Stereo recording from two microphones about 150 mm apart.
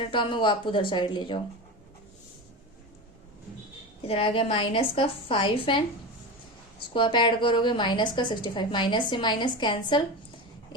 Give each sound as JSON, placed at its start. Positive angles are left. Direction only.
{"t": 0.0, "sound": "a woman's voice", "side_deg": 30}
{"t": 4.0, "sound": "a woman's voice", "side_deg": 35}
{"t": 6.9, "sound": "a woman's voice", "side_deg": 30}